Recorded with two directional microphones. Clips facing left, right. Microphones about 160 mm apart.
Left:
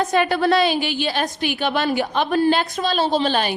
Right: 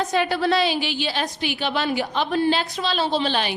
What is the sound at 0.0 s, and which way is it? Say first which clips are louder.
A woman's voice: left 3 dB; 50° left (ahead or behind).